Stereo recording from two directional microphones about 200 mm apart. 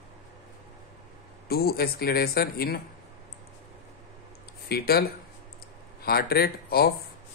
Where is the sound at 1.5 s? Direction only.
50° left (ahead or behind).